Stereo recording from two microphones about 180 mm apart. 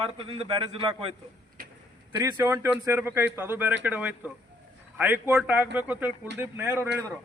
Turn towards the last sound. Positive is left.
turn(degrees=-10)  # may be behind; listen again after turning